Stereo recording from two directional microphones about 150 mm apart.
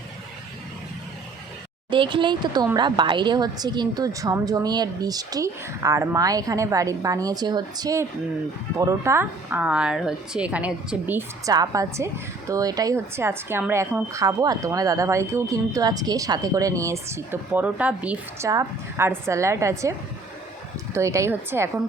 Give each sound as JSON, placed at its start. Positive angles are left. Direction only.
{"t": 1.9, "sound": "a woman's voice", "side_deg": -30}
{"t": 11.5, "sound": "a woman's voice", "side_deg": -25}
{"t": 18.4, "sound": "a woman's voice", "side_deg": -20}
{"t": 20.9, "sound": "a woman's voice", "side_deg": -20}